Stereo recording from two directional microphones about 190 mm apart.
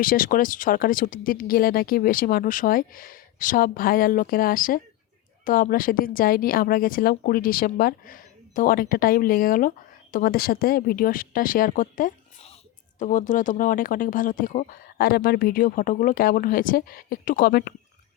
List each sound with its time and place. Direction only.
0.0 s a woman's voice: 45° left (ahead or behind)